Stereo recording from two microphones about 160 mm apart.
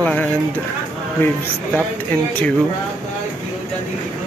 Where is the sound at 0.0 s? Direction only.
5° left (ahead or behind).